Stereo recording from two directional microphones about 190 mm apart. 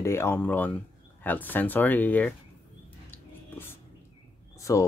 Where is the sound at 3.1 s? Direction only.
10° left (ahead or behind).